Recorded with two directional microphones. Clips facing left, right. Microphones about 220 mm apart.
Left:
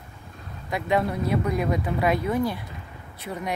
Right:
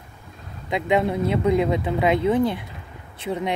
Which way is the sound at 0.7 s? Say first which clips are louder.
Right 3 dB; 20° right (ahead or behind).